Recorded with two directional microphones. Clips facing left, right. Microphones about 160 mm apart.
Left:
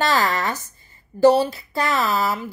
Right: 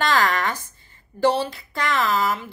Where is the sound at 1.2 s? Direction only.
40° left (ahead or behind).